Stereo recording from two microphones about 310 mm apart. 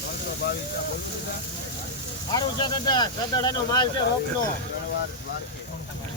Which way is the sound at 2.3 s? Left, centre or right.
Centre.